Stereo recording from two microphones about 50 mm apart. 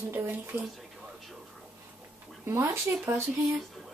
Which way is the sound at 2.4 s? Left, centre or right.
Right.